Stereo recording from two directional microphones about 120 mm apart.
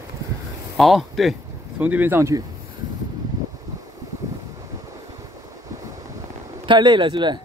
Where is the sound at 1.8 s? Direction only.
15° right (ahead or behind).